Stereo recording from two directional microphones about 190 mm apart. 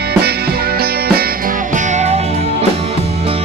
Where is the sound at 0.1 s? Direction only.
55° right (ahead or behind).